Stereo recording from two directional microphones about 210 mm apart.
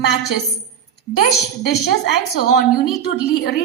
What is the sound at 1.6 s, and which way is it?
A woman's voice, 50° left (ahead or behind).